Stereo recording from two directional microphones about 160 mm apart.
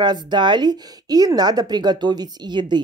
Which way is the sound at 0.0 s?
25° right (ahead or behind).